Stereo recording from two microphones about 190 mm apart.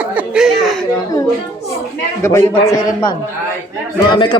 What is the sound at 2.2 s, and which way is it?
Speech, 15° left (ahead or behind).